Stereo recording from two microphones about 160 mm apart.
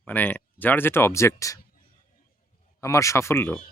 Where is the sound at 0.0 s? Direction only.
10° left (ahead or behind).